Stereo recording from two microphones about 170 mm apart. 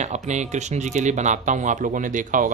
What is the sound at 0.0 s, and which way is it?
Speech, 45° right (ahead or behind).